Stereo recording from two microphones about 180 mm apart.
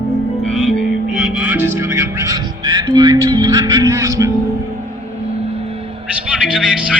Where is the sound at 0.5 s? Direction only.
5° left (ahead or behind).